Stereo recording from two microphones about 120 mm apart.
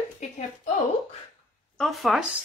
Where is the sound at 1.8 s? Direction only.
Centre (ahead or behind).